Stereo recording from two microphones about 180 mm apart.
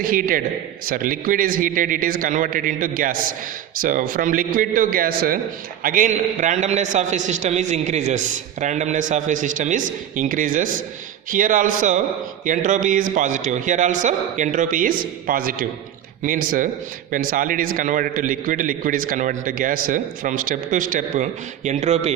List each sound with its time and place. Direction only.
0.0 s a man's voice: 50° right (ahead or behind)